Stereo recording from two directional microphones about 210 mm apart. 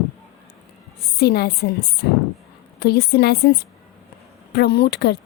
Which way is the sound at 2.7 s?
50° left (ahead or behind).